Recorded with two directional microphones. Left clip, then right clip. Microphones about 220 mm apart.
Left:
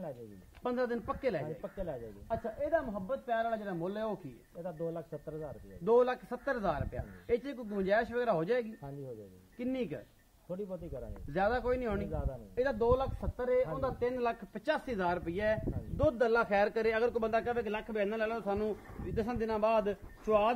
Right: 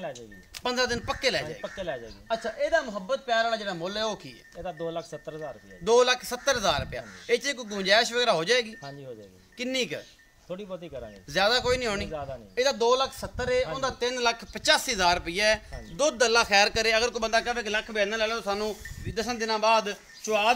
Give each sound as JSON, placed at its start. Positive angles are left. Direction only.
{"t": 0.7, "sound": "a man's voice", "side_deg": -15}
{"t": 11.3, "sound": "speech", "side_deg": -15}
{"t": 16.0, "sound": "speech", "side_deg": -5}